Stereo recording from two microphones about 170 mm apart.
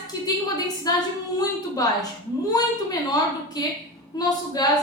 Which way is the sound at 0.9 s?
20° left (ahead or behind).